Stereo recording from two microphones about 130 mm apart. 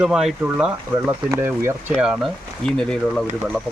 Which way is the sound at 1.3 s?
20° right (ahead or behind).